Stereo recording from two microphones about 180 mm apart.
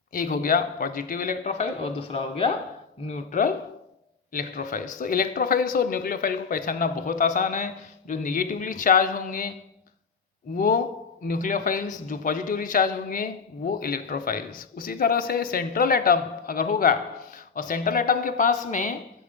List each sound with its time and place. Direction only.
0.1 s speech: 50° left (ahead or behind); by 2.5 s 35° left (ahead or behind)
3.1 s speech: 45° left (ahead or behind)
11.3 s speech: 45° left (ahead or behind)